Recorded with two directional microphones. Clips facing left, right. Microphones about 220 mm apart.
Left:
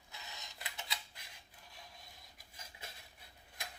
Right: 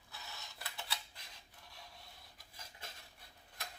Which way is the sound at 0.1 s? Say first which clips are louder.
Even; 15° left (ahead or behind).